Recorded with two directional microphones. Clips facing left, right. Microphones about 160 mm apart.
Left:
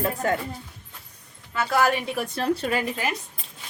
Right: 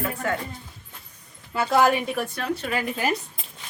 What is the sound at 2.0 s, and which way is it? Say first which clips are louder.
Speech: right 1 dB; 5° left (ahead or behind).